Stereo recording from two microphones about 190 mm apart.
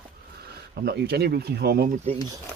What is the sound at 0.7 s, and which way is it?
Speech, 55° right (ahead or behind).